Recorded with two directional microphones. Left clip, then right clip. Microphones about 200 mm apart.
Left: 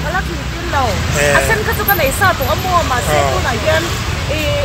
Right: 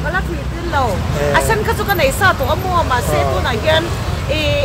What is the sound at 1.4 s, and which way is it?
Speech, 25° right (ahead or behind).